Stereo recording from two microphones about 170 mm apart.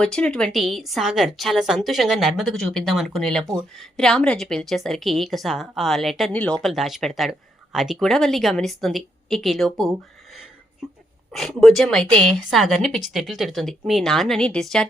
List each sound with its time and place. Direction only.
0.0 s a woman's voice: 5° left (ahead or behind)
3.4 s speech: 20° right (ahead or behind)
3.8 s a woman's voice: 5° left (ahead or behind)
11.3 s a woman's voice: centre (ahead or behind)